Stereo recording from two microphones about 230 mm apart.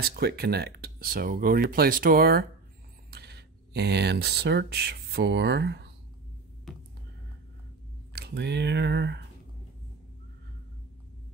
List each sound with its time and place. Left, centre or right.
0.0 s speech: right
6.7 s throbbing: centre
8.1 s speech: right